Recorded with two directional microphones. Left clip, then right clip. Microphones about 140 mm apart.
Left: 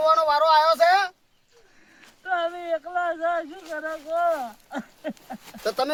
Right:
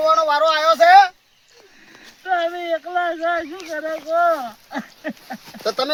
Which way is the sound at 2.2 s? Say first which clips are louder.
Right 5 dB; 40° left (ahead or behind).